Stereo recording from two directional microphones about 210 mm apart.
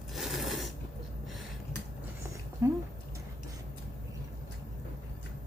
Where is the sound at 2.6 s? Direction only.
15° right (ahead or behind).